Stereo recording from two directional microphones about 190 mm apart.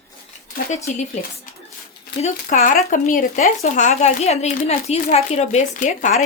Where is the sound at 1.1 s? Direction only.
35° left (ahead or behind).